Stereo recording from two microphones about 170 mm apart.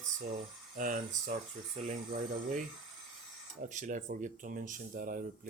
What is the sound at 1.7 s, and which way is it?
Speech, 40° right (ahead or behind).